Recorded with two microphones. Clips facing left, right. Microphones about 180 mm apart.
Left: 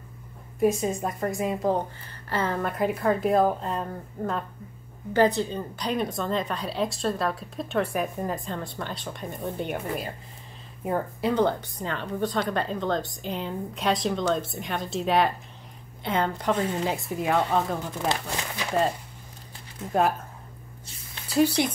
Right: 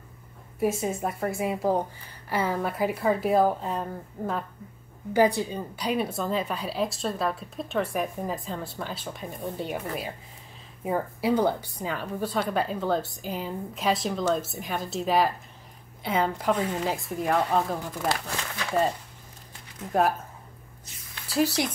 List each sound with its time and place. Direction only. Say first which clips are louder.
0.6 s speech: left 3 dB; 5° right (ahead or behind)
10.8 s speech: left 1 dB; centre (ahead or behind)
18.2 s speech: left 2 dB; 20° left (ahead or behind)
19.9 s speech: even; centre (ahead or behind)
21.3 s speech: left 3 dB; centre (ahead or behind)